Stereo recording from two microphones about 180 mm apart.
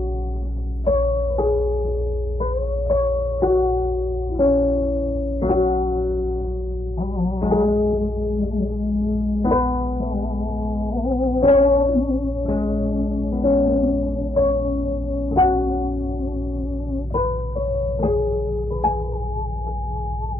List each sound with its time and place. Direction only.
0.9 s music: 35° left (ahead or behind)
2.4 s music: 30° left (ahead or behind)
9.4 s music: 25° left (ahead or behind)
11.3 s music: 35° left (ahead or behind)
17.1 s music: 30° left (ahead or behind)